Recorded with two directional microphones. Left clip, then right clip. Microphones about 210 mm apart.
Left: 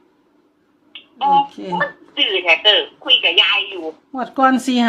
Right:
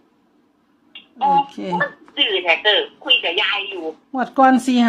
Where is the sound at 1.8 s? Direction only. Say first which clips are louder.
Left 2 dB; 15° left (ahead or behind).